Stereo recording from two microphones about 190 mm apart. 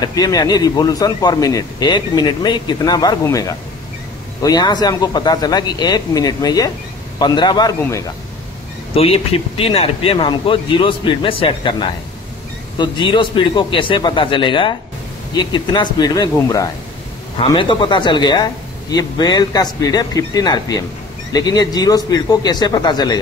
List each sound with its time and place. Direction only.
0.0 s speech: 20° left (ahead or behind)